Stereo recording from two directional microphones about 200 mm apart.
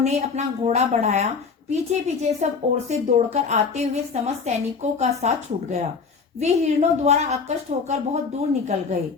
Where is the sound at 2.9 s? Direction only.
35° right (ahead or behind).